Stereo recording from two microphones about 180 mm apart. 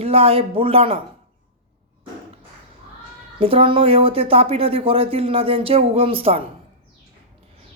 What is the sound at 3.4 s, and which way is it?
Speech, 30° right (ahead or behind).